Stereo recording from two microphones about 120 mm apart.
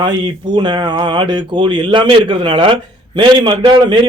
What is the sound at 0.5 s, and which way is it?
A man's voice, 40° right (ahead or behind).